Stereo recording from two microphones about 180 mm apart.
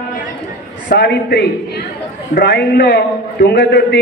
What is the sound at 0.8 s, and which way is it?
A man's voice, 60° left (ahead or behind).